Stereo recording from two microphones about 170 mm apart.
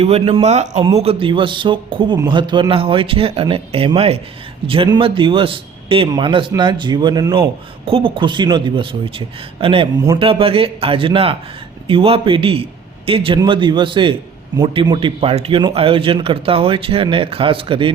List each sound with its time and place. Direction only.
0.0 s a man's voice: 35° right (ahead or behind)